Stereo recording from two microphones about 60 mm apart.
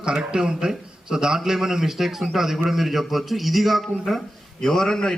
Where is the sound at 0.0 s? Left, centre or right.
Centre.